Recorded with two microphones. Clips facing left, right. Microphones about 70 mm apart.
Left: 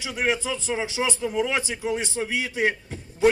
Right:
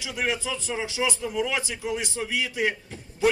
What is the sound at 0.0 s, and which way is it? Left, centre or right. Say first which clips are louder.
Speech: left 3 dB; left.